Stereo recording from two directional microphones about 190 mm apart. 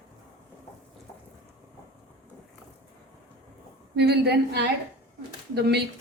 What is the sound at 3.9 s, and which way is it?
A woman's voice, 60° right (ahead or behind).